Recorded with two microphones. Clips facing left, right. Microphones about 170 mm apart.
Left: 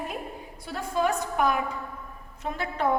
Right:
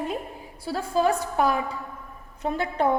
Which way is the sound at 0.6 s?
30° right (ahead or behind).